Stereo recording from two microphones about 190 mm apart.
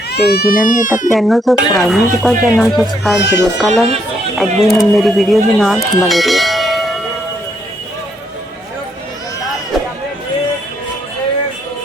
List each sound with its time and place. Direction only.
0.1 s speech: 60° left (ahead or behind)
1.1 s speech: centre (ahead or behind)